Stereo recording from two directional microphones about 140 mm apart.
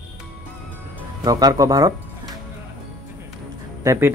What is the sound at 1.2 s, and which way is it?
Speech, 25° right (ahead or behind).